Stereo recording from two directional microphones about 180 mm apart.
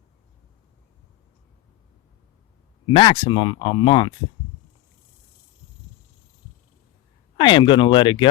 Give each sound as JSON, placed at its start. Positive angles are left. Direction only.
{"t": 2.8, "sound": "speech", "side_deg": 25}
{"t": 7.3, "sound": "speech", "side_deg": 25}